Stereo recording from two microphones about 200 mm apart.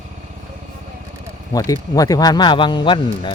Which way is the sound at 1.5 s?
20° left (ahead or behind).